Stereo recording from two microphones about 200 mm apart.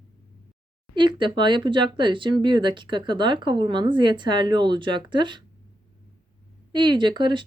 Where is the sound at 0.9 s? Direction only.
25° right (ahead or behind).